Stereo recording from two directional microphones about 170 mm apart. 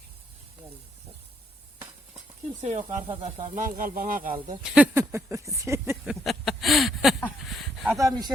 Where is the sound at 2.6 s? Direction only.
45° right (ahead or behind).